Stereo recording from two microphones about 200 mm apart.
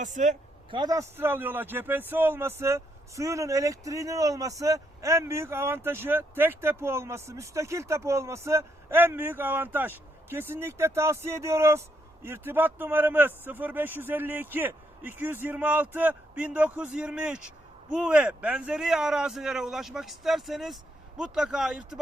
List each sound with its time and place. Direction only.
0.0 s a man's voice: 35° right (ahead or behind)
0.7 s a man's voice: 20° right (ahead or behind); by 22.0 s 5° right (ahead or behind)